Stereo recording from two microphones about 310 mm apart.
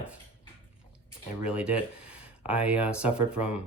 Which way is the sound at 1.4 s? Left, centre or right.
Centre.